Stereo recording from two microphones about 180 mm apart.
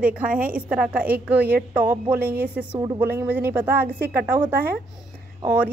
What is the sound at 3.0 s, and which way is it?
Speech, 10° right (ahead or behind).